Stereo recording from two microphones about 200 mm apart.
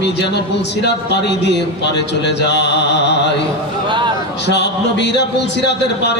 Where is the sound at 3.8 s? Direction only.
25° right (ahead or behind).